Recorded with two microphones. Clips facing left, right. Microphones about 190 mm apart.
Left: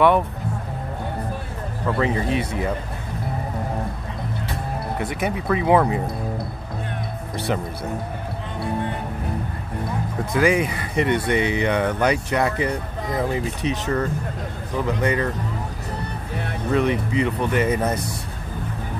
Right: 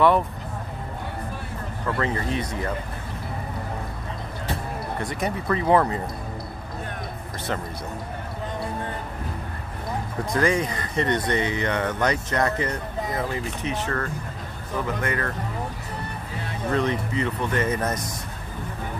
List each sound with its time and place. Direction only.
1.9 s speech: 15° left (ahead or behind)
4.9 s speech: 5° left (ahead or behind)
10.3 s speech: 10° left (ahead or behind)
16.7 s speech: 15° left (ahead or behind)